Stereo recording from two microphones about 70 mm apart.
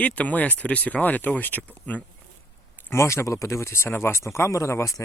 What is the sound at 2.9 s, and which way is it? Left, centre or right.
Speech, left.